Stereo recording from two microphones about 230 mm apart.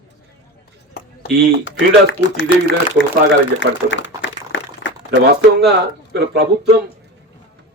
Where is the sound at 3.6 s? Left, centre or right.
Left.